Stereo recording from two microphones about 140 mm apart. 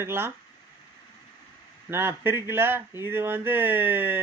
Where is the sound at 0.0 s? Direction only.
15° right (ahead or behind).